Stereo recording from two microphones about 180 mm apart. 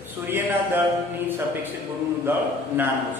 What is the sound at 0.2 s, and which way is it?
A man's voice, 10° right (ahead or behind).